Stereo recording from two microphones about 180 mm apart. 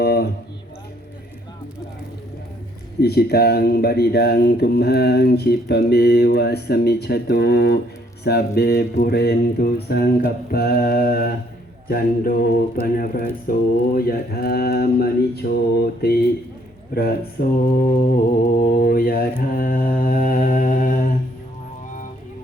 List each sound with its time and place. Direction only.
0.0 s speech: 60° left (ahead or behind)
3.0 s speech: 60° left (ahead or behind)
18.4 s mantra: 50° left (ahead or behind)